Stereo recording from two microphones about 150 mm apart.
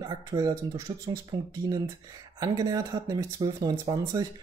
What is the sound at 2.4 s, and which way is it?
Speech, 25° right (ahead or behind).